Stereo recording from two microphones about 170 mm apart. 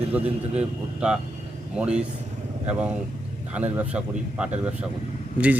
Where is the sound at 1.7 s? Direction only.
5° right (ahead or behind).